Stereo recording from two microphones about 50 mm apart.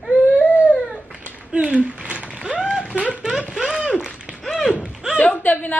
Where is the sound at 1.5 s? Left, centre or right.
Right.